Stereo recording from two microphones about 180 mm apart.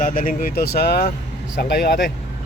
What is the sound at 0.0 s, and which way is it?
Speech, 50° left (ahead or behind).